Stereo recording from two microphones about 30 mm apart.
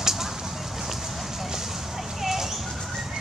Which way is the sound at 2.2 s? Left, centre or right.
Centre.